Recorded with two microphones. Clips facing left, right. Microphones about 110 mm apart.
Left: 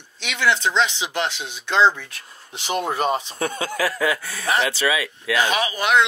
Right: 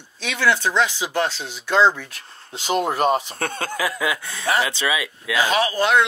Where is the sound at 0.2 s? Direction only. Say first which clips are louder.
Right 1 dB; 20° left (ahead or behind).